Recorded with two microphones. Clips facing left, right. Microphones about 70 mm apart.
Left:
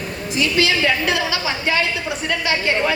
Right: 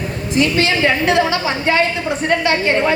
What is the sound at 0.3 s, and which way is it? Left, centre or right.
A woman's voice, right.